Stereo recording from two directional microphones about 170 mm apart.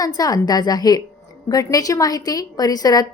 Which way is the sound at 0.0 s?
20° left (ahead or behind).